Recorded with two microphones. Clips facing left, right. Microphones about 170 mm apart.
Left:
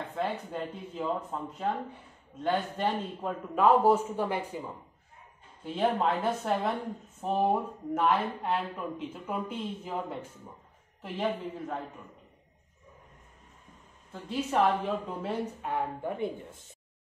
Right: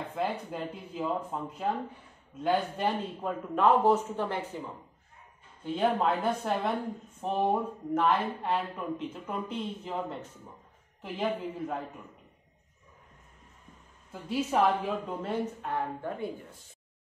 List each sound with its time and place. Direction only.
0.1 s speech: 5° right (ahead or behind)
5.6 s speech: centre (ahead or behind)
14.1 s speech: 5° right (ahead or behind)
15.6 s a woman's voice: 10° left (ahead or behind)
16.2 s speech: 25° left (ahead or behind)